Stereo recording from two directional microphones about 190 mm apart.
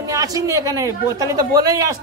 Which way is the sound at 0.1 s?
15° right (ahead or behind).